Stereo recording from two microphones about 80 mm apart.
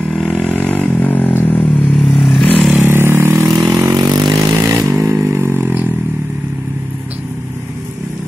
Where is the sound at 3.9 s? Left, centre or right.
Right.